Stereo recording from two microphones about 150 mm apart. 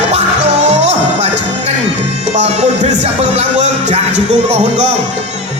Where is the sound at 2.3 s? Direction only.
50° right (ahead or behind).